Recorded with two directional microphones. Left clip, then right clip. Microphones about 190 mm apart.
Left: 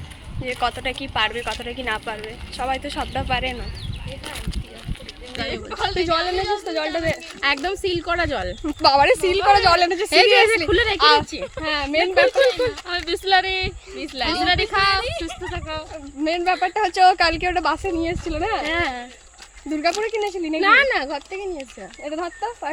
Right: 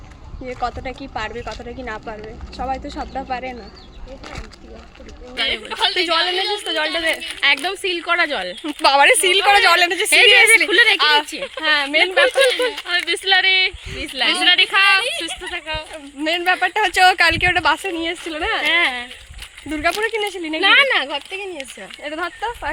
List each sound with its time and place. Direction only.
0.6 s speech: centre (ahead or behind)
5.8 s a woman's voice: 50° left (ahead or behind)
6.7 s speech: centre (ahead or behind)
7.4 s speech: 20° left (ahead or behind)
8.6 s speech: centre (ahead or behind)
10.7 s speech: 10° left (ahead or behind)
11.0 s speech: 5° right (ahead or behind)
12.9 s speech: 20° left (ahead or behind)
14.2 s speech: 5° left (ahead or behind)
16.2 s speech: 5° right (ahead or behind)
18.7 s speech: 15° left (ahead or behind)
19.7 s speech: 5° right (ahead or behind)
20.1 s speech: centre (ahead or behind)